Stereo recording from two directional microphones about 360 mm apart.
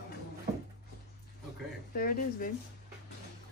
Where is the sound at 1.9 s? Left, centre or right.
Left.